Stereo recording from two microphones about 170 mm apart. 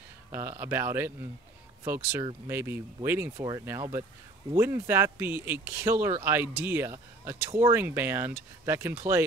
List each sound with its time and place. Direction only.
0.3 s speech: 15° right (ahead or behind)